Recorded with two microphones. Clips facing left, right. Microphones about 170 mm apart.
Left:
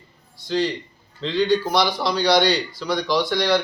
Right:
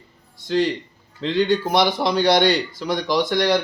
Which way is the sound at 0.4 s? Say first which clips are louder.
Right 2 dB; 50° right (ahead or behind).